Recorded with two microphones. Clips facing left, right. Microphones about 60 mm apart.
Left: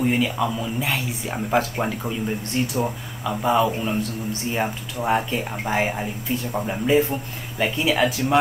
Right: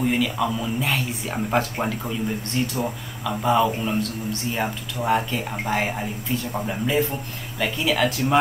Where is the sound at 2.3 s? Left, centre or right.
Left.